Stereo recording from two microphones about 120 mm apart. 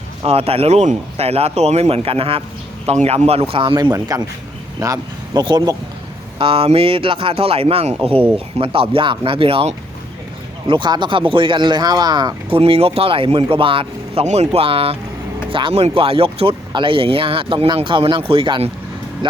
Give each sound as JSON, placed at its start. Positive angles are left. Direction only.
{"t": 0.3, "sound": "speech", "side_deg": -55}
{"t": 2.8, "sound": "speech", "side_deg": -65}
{"t": 3.5, "sound": "speech", "side_deg": -45}
{"t": 3.9, "sound": "speech", "side_deg": -30}
{"t": 6.4, "sound": "speech", "side_deg": -50}
{"t": 12.5, "sound": "speech", "side_deg": -50}
{"t": 14.3, "sound": "speech", "side_deg": -60}